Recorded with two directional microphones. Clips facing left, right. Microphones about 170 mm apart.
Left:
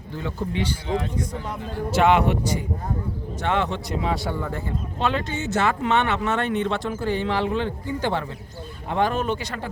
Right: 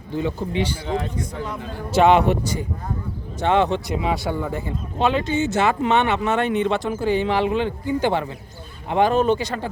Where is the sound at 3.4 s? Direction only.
25° right (ahead or behind).